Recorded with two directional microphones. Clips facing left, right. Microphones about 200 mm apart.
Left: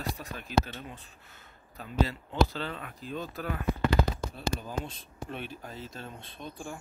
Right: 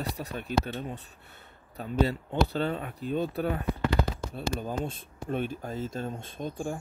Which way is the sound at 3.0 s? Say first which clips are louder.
Right 8 dB; 60° right (ahead or behind).